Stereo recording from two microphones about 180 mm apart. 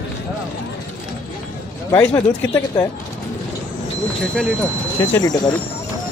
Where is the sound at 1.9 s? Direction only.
15° left (ahead or behind).